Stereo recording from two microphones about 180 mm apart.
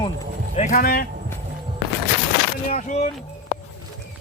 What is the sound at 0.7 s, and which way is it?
Speech, 55° left (ahead or behind).